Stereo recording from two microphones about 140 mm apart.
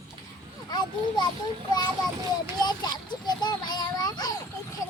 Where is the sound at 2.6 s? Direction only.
30° left (ahead or behind).